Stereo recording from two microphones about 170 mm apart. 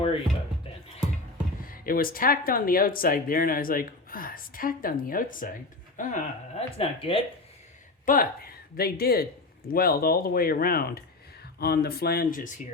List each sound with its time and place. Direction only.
1.6 s speech: 55° left (ahead or behind)
6.7 s speech: 35° left (ahead or behind)
8.0 s speech: 55° left (ahead or behind)